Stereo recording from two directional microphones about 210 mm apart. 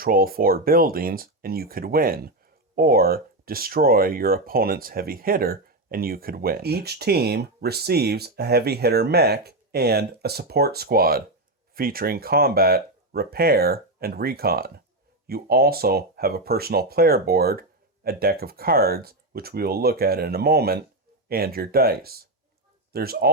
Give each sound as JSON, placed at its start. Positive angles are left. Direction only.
{"t": 0.0, "sound": "speech", "side_deg": -45}